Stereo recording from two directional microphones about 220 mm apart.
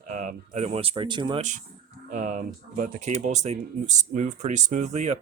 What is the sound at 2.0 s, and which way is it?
Speech, 35° right (ahead or behind).